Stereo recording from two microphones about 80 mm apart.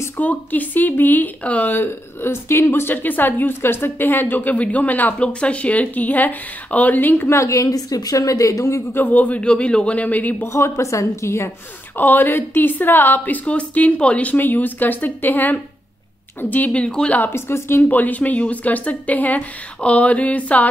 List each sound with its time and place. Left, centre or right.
0.2 s speech: left
7.3 s a woman's voice: left
9.0 s a man's voice: left
10.5 s a woman's voice: left
12.0 s speech: left
17.2 s a woman's voice: left
17.8 s speech: left